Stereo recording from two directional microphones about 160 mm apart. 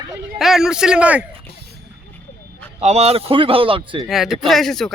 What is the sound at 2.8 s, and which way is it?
Speech, 40° right (ahead or behind).